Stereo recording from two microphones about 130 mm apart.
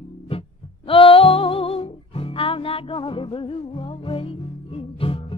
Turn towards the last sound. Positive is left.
turn(degrees=45)  # may be behind; listen again after turning